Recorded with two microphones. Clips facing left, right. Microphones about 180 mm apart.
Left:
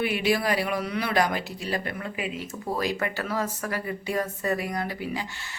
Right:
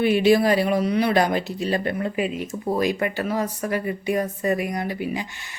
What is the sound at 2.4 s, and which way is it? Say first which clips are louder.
Speech: right 3 dB; 20° right (ahead or behind).